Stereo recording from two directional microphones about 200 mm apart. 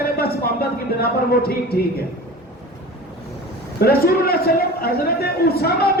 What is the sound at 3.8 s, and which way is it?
A man's voice, 50° left (ahead or behind).